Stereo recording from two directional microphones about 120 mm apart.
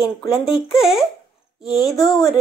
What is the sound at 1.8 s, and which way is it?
Speech, 35° left (ahead or behind).